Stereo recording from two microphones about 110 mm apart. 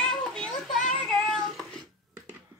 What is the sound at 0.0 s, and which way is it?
Child singing, 5° left (ahead or behind).